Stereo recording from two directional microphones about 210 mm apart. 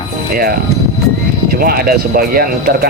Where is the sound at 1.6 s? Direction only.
45° right (ahead or behind).